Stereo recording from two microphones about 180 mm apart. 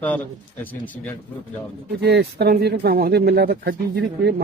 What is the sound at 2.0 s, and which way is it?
Speech, 65° right (ahead or behind).